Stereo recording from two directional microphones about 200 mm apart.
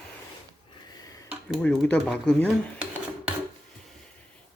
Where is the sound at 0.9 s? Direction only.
20° left (ahead or behind).